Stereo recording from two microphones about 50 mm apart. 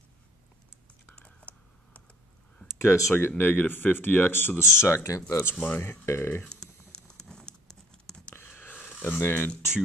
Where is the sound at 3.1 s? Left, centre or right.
Left.